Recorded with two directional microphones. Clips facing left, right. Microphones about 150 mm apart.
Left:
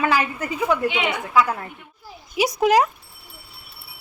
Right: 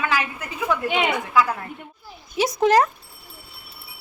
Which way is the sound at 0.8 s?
45° right (ahead or behind).